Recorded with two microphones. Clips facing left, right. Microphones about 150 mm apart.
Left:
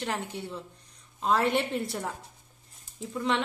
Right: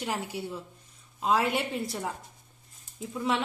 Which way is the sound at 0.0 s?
10° right (ahead or behind).